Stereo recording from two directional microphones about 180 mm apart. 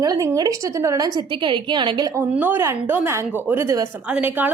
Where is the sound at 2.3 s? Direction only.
10° right (ahead or behind).